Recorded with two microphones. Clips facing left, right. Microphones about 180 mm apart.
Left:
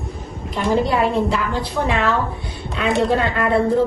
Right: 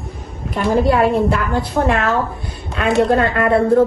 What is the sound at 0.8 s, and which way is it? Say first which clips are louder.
A woman's voice: right 4 dB; 55° right (ahead or behind).